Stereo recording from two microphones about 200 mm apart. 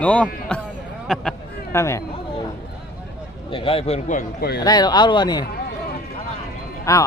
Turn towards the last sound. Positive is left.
turn(degrees=15)  # may be behind; listen again after turning